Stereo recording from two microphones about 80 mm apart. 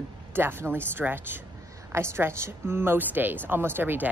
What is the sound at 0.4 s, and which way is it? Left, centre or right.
Speech, right.